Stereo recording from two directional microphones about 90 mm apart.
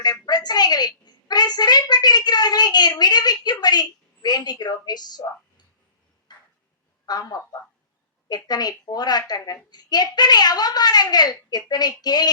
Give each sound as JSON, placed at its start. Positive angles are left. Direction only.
{"t": 0.0, "sound": "a woman's voice", "side_deg": 50}
{"t": 6.3, "sound": "a sound", "side_deg": 55}
{"t": 7.0, "sound": "a woman's voice", "side_deg": 45}